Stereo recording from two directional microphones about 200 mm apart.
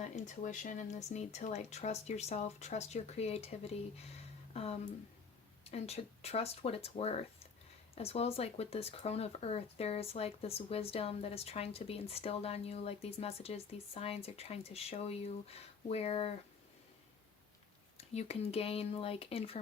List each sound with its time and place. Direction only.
0.3 s speech: 40° left (ahead or behind)
17.9 s speech: 30° left (ahead or behind)